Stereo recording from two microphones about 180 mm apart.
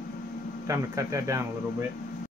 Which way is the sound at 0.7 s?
15° right (ahead or behind).